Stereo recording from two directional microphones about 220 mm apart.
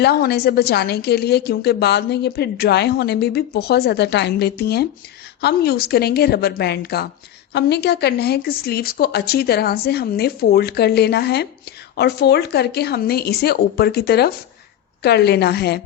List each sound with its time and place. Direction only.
0.0 s a woman's voice: 45° left (ahead or behind)